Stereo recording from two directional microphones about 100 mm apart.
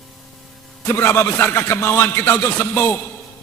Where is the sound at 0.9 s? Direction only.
25° left (ahead or behind).